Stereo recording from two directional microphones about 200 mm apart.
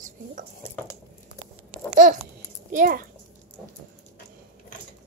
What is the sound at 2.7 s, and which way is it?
Speech, 40° right (ahead or behind).